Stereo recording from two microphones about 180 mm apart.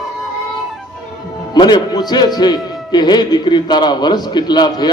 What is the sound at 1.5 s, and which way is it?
A man's voice, 25° left (ahead or behind).